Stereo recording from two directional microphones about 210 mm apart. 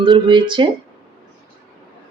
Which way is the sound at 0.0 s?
25° right (ahead or behind).